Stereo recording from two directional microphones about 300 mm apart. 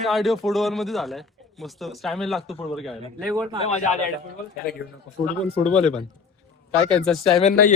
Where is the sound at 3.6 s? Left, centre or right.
Left.